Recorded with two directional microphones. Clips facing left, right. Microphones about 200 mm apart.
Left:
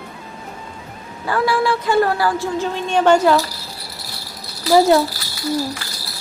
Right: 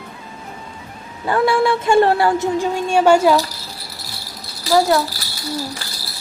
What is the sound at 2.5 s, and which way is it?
Speech, 10° right (ahead or behind).